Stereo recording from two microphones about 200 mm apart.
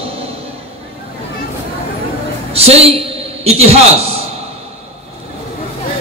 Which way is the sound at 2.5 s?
30° right (ahead or behind).